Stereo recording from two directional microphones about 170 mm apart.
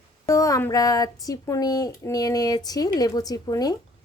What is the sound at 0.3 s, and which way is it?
A woman's voice, 20° left (ahead or behind).